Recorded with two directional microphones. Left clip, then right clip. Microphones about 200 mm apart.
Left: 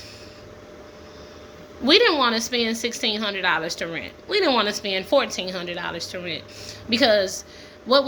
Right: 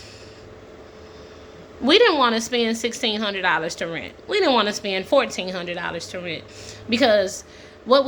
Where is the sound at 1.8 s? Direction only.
20° right (ahead or behind).